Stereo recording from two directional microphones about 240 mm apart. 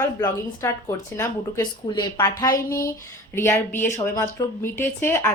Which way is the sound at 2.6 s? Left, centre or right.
Left.